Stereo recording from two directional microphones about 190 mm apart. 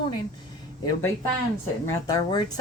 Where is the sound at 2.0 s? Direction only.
20° left (ahead or behind).